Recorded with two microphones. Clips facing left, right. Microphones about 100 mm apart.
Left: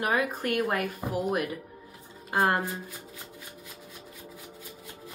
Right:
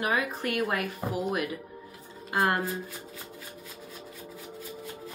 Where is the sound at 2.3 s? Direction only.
30° left (ahead or behind).